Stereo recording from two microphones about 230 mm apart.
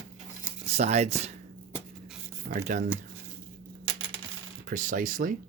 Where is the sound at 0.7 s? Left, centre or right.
Right.